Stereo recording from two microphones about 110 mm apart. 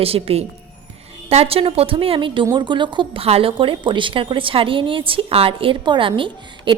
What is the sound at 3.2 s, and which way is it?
A woman's voice, 60° right (ahead or behind).